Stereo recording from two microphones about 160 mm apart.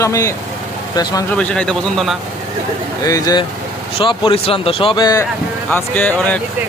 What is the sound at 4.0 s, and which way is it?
Speech, 35° left (ahead or behind).